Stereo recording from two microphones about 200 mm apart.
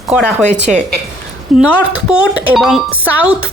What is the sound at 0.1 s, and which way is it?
A woman's voice, 5° right (ahead or behind).